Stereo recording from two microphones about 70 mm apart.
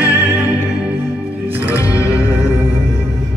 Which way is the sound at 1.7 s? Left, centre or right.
Left.